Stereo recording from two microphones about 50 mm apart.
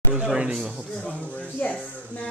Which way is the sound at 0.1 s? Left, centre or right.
Right.